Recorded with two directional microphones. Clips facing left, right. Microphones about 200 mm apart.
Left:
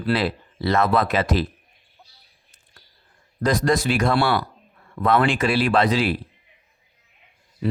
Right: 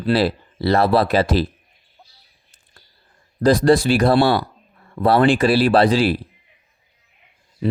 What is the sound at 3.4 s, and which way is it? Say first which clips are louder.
Speech: right 6 dB; 30° right (ahead or behind).